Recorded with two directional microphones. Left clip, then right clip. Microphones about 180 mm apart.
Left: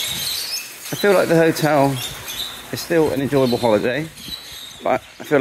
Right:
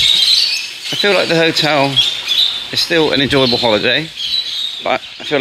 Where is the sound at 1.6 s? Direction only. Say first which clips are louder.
Right 3 dB; 10° left (ahead or behind).